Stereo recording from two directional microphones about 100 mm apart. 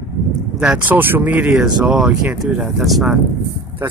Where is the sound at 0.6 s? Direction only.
15° right (ahead or behind).